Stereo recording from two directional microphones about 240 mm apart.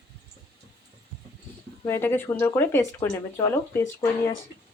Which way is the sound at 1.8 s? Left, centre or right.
Centre.